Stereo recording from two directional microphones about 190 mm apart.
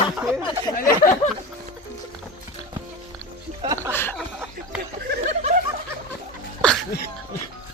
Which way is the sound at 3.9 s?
10° left (ahead or behind).